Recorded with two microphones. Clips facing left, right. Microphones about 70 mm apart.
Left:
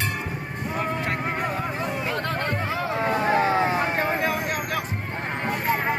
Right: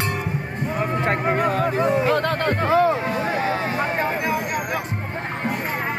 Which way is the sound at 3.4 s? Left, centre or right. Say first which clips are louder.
Left 2 dB; left.